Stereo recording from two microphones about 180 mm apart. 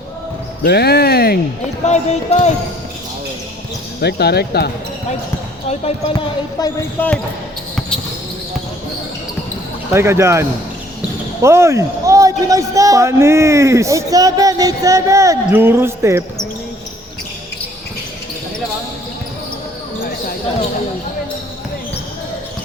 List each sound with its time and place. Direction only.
0.6 s speech: 60° left (ahead or behind)
1.9 s speech: 40° left (ahead or behind)
4.0 s speech: 65° left (ahead or behind)
6.6 s speech: 20° left (ahead or behind)
9.9 s a man's voice: 15° right (ahead or behind)
11.4 s a man's voice: 15° right (ahead or behind)